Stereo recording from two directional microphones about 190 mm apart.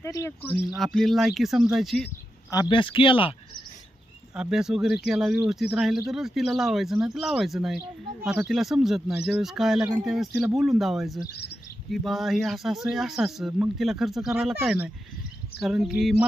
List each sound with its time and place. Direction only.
0.0 s speech: 15° left (ahead or behind)
0.7 s speech: centre (ahead or behind)
2.5 s speech: 25° left (ahead or behind)
4.4 s speech: 5° right (ahead or behind)
11.2 s speech: 60° left (ahead or behind)
11.9 s speech: centre (ahead or behind)